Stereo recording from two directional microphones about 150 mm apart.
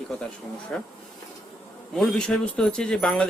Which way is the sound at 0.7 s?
5° left (ahead or behind).